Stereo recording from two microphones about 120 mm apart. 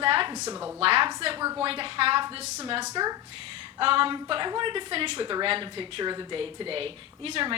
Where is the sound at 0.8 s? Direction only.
50° right (ahead or behind).